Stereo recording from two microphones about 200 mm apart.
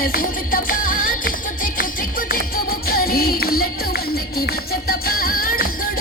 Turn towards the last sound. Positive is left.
turn(degrees=45)  # may be behind; listen again after turning